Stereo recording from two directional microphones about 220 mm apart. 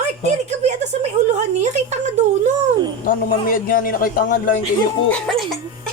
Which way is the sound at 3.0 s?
40° left (ahead or behind).